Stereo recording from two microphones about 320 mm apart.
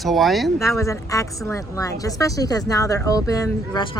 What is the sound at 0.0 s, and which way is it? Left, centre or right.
Speech, centre.